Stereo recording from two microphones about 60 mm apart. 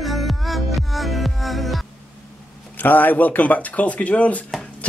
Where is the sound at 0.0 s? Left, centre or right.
Centre.